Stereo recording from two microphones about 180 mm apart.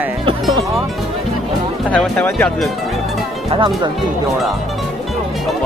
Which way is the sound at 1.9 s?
5° left (ahead or behind).